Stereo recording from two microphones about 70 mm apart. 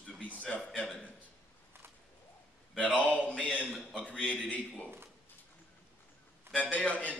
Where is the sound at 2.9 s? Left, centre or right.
Left.